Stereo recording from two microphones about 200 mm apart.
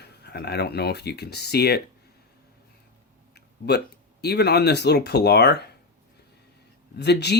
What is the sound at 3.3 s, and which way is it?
Speech, 55° left (ahead or behind).